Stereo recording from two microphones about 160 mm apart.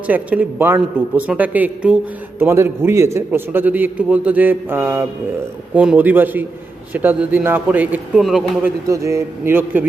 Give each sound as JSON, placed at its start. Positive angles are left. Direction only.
{"t": 0.1, "sound": "a man's voice", "side_deg": -10}
{"t": 8.9, "sound": "a man's voice", "side_deg": -20}